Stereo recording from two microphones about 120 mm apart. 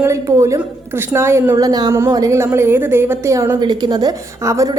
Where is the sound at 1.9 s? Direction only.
20° right (ahead or behind).